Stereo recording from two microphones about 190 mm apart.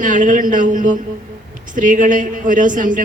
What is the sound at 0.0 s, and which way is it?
A man's voice, 45° right (ahead or behind).